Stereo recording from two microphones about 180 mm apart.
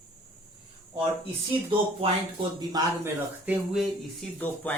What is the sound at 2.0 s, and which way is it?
Speech, 30° right (ahead or behind).